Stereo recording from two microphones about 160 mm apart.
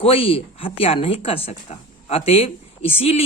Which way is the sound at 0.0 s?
35° left (ahead or behind).